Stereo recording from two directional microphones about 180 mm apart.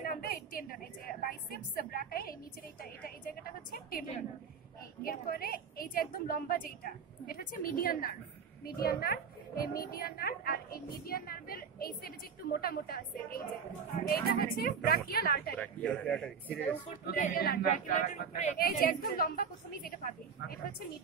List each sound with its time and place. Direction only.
0.0 s a woman's voice: 55° left (ahead or behind)
5.0 s a woman's voice: 50° left (ahead or behind)
15.5 s a man's voice: 5° left (ahead or behind)
17.0 s a woman's voice: 55° left (ahead or behind)
18.7 s a woman's voice: 50° left (ahead or behind)